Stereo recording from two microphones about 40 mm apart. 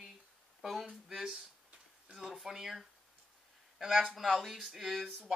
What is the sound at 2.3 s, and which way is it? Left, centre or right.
Speech, centre.